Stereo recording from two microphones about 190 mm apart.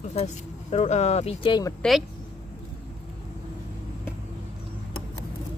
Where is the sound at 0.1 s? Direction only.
35° left (ahead or behind).